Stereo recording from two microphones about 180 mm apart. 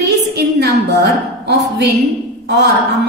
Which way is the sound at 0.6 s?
65° right (ahead or behind).